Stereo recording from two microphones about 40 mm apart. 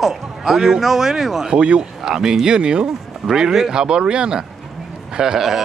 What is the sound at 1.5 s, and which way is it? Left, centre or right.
Speech, right.